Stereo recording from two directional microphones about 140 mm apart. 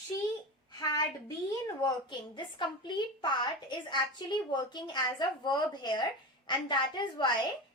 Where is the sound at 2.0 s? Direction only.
35° left (ahead or behind).